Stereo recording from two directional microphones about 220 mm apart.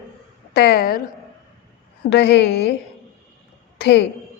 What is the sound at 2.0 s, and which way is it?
Speech, 50° left (ahead or behind).